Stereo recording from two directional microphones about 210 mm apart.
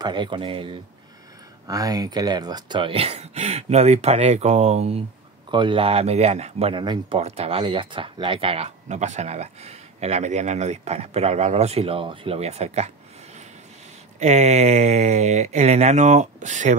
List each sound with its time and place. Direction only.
0.0 s speech: 20° right (ahead or behind)